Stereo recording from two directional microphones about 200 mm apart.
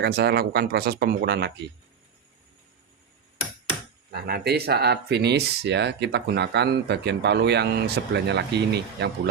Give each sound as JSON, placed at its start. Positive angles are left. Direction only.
{"t": 0.2, "sound": "speech", "side_deg": -50}
{"t": 4.1, "sound": "speech", "side_deg": -50}